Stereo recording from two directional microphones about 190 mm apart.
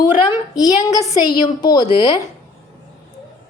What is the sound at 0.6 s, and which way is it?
Speech, 20° left (ahead or behind).